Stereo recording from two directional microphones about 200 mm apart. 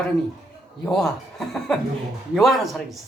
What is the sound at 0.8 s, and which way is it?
Speech, centre (ahead or behind).